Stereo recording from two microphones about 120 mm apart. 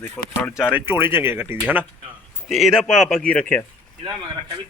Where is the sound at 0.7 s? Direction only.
20° right (ahead or behind).